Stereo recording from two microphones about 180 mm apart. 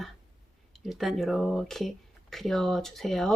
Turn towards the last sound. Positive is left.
turn(degrees=0)  # may be behind; listen again after turning